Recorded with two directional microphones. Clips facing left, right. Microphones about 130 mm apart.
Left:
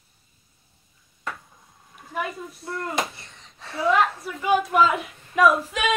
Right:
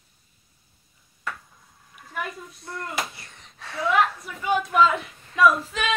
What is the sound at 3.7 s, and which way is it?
Speech, 25° left (ahead or behind).